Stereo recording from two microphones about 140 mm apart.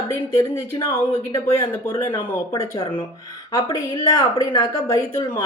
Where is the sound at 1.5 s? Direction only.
20° left (ahead or behind).